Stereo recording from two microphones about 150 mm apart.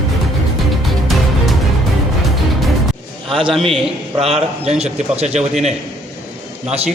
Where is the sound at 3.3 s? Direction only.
35° right (ahead or behind).